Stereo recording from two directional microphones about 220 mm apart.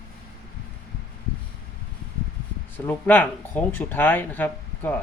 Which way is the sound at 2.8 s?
10° left (ahead or behind).